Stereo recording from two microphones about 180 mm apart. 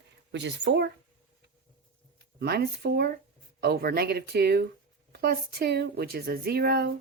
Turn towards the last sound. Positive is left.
turn(degrees=-60)  # may be behind; listen again after turning